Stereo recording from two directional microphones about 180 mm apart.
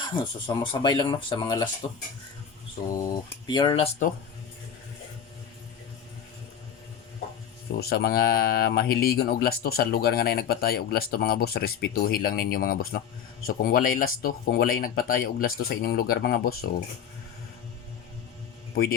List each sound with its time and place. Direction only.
0.0 s speech: 25° left (ahead or behind)
2.9 s speech: 20° left (ahead or behind)
7.8 s speech: 60° left (ahead or behind)